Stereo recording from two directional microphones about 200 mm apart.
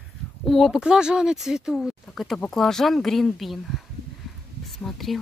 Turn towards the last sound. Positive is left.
turn(degrees=0)  # may be behind; listen again after turning